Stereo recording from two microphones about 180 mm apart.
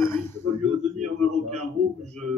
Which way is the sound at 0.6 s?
40° right (ahead or behind).